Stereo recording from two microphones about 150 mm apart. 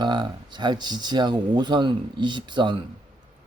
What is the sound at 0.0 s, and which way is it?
Speech, 30° right (ahead or behind).